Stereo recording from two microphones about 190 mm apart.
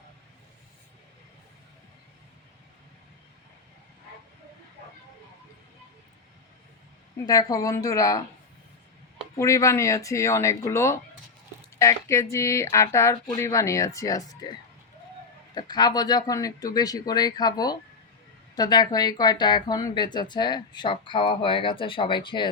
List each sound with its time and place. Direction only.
7.3 s speech: 20° left (ahead or behind)
9.3 s speech: 15° left (ahead or behind)
15.5 s speech: 20° left (ahead or behind)